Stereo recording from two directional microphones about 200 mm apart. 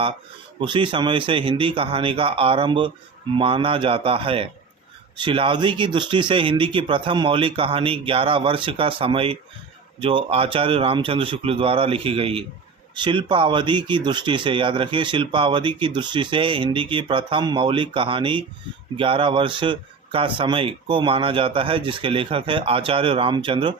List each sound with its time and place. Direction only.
0.6 s speech: 25° right (ahead or behind)